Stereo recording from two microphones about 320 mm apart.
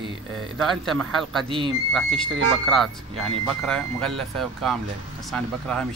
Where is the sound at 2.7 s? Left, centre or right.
Centre.